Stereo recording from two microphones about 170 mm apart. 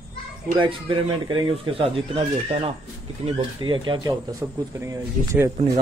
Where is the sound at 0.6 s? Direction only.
30° right (ahead or behind).